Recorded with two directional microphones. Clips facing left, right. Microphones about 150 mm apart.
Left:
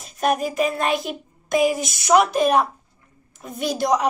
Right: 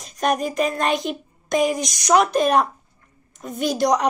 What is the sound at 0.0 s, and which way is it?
A child's voice, 5° left (ahead or behind).